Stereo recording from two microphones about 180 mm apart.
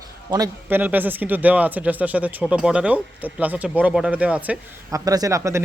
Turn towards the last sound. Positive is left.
turn(degrees=-15)  # may be behind; listen again after turning